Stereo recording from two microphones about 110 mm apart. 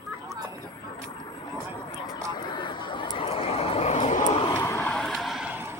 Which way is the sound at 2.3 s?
45° left (ahead or behind).